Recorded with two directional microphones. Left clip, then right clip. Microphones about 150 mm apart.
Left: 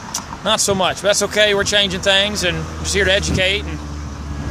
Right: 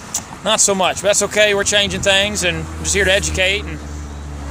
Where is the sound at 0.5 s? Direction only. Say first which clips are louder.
Right 1 dB; 10° right (ahead or behind).